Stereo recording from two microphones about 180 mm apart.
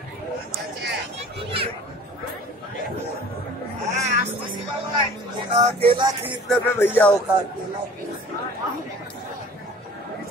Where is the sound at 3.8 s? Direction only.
40° right (ahead or behind).